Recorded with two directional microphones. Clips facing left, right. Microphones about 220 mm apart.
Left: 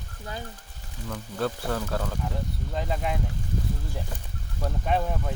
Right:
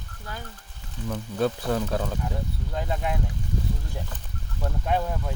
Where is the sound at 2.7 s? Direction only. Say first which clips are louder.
Even; centre (ahead or behind).